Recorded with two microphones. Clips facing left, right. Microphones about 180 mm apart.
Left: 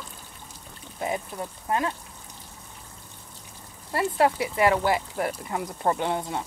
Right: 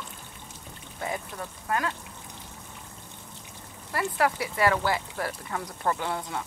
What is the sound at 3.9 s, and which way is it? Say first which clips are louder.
Speech: left 4 dB; 25° left (ahead or behind).